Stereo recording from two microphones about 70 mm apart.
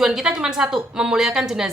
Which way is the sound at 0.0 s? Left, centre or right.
Centre.